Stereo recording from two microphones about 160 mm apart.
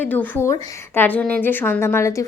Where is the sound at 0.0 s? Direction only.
10° left (ahead or behind).